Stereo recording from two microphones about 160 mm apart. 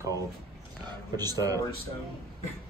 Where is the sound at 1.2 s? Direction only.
25° right (ahead or behind).